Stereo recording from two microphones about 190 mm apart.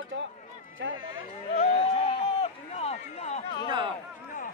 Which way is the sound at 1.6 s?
35° left (ahead or behind).